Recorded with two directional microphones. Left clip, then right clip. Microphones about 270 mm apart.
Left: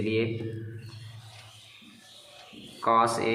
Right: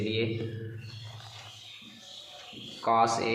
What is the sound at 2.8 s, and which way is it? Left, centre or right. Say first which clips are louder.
Speech: left 2 dB; left.